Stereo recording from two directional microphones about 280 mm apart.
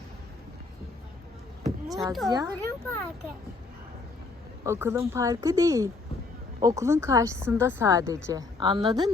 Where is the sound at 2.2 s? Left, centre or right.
Centre.